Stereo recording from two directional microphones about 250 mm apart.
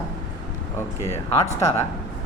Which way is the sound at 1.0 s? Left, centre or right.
Centre.